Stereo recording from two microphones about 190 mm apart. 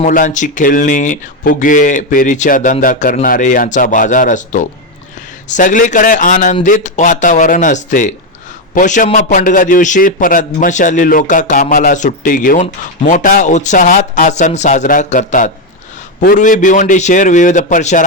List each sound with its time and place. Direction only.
0.0 s a man's voice: 40° left (ahead or behind)